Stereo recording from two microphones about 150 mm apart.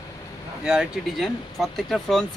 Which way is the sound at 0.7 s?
5° right (ahead or behind).